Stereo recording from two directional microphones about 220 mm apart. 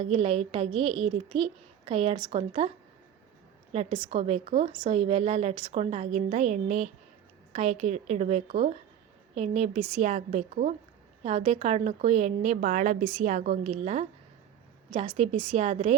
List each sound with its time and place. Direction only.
0.0 s a woman's voice: 25° right (ahead or behind)